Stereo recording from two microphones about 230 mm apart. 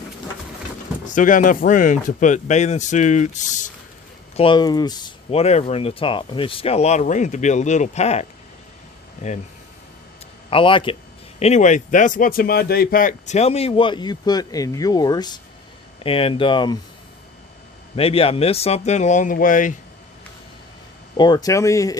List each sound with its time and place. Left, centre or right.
1.0 s speech: left
4.4 s a man's voice: left
10.5 s a man's voice: left
17.9 s a man's voice: left
21.2 s speech: centre